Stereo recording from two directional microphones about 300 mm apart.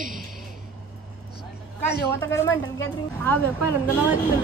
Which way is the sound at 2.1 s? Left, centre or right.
Centre.